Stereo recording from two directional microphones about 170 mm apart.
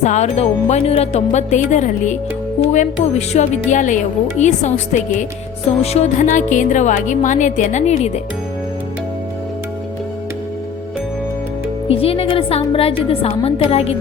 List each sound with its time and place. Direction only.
0.0 s speech: 40° left (ahead or behind)
11.9 s speech: 35° left (ahead or behind)